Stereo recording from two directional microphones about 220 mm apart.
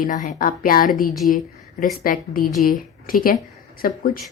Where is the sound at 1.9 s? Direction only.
40° left (ahead or behind).